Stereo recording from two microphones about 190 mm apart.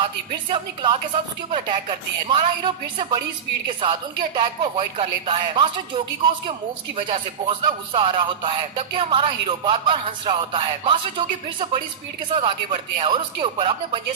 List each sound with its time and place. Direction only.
0.5 s music: 25° right (ahead or behind)
12.3 s music: 30° right (ahead or behind)